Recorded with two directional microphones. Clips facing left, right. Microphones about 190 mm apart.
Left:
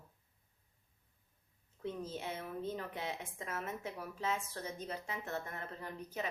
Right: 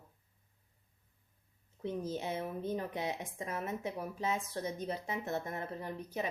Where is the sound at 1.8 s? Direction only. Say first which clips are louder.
Right 4 dB; 15° right (ahead or behind).